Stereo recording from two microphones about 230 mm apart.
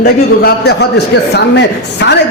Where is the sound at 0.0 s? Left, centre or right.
Left.